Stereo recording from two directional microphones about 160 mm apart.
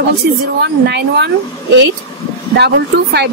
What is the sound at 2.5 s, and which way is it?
Speech, 90° right.